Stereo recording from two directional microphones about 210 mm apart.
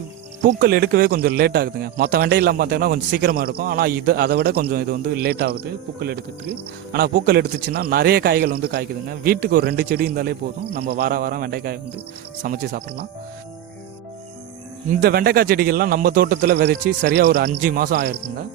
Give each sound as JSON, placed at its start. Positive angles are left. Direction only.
{"t": 0.4, "sound": "speech", "side_deg": -50}
{"t": 14.8, "sound": "speech", "side_deg": -45}